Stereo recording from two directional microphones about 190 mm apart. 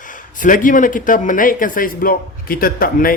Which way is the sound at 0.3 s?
45° left (ahead or behind).